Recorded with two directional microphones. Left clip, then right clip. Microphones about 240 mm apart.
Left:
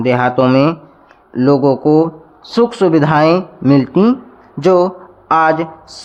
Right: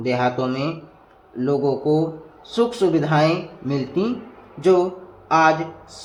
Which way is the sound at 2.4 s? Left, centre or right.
Left.